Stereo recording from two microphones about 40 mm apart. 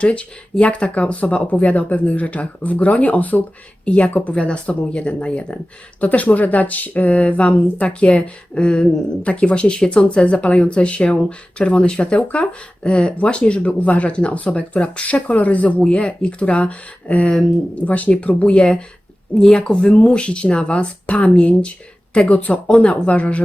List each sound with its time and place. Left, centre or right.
0.0 s speech: left
6.0 s speech: left